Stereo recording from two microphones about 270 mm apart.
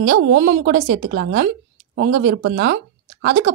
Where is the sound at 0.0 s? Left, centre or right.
Right.